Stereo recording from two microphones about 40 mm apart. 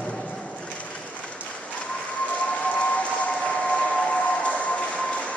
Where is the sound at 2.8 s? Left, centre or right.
Left.